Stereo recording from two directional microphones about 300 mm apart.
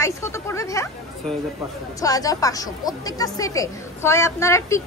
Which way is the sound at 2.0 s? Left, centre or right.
Centre.